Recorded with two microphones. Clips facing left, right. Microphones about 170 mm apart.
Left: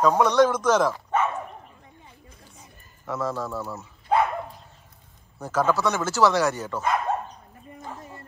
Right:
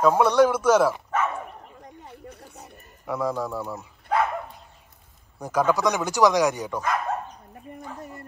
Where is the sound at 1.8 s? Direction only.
65° right (ahead or behind).